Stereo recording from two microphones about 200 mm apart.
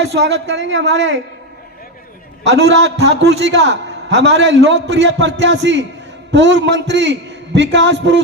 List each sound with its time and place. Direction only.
0.0 s a man's voice: 60° right (ahead or behind)
2.4 s a man's voice: 60° right (ahead or behind)